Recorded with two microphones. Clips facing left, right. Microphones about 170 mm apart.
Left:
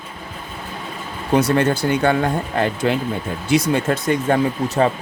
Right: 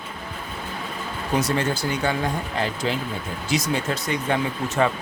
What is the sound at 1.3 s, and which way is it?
Speech, 60° left (ahead or behind).